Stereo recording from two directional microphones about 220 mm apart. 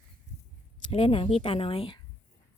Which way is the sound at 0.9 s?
25° left (ahead or behind).